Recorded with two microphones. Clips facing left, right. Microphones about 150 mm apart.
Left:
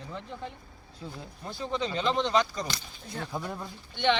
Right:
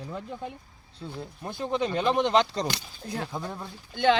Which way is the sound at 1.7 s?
55° right (ahead or behind).